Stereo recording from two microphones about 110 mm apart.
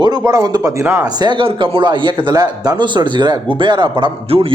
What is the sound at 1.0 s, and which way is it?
Speech, 45° right (ahead or behind).